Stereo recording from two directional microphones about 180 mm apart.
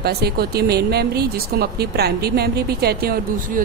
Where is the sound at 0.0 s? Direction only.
60° right (ahead or behind).